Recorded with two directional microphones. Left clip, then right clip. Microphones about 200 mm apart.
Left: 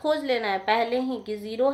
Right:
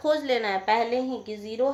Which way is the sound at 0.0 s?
5° left (ahead or behind).